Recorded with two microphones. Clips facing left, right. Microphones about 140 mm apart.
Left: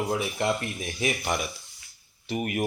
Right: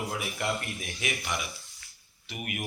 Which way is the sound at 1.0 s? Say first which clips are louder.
Left 7 dB; 40° left (ahead or behind).